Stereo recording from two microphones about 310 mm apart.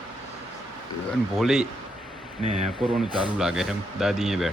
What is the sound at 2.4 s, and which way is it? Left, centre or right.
Speech, centre.